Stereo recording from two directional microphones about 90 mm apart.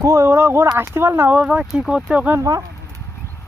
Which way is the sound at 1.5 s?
10° right (ahead or behind).